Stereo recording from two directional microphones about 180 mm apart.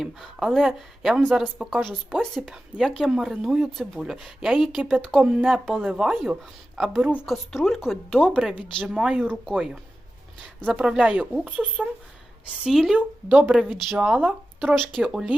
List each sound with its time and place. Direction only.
0.0 s speech: centre (ahead or behind)
10.7 s speech: 5° right (ahead or behind)